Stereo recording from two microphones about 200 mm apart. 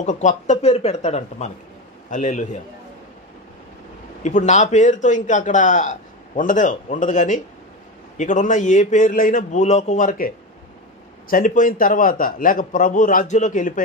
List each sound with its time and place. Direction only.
0.0 s a man's voice: 40° left (ahead or behind)
4.2 s a man's voice: 35° left (ahead or behind)